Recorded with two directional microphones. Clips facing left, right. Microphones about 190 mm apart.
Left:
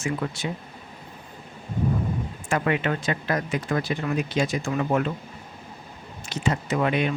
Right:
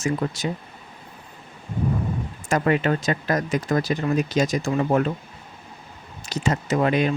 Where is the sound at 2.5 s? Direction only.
40° right (ahead or behind).